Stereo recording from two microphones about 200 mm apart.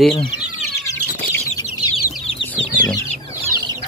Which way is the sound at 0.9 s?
15° left (ahead or behind).